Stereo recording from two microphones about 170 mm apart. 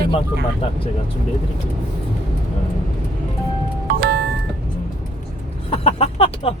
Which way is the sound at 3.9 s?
70° right (ahead or behind).